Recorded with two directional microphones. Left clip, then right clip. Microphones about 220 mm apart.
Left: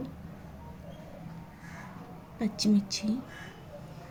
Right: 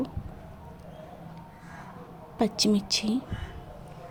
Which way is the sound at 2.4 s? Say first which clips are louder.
Right 5 dB; 35° right (ahead or behind).